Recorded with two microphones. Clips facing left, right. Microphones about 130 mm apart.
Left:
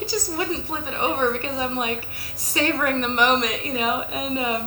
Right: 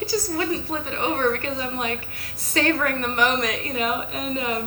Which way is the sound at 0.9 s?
15° left (ahead or behind).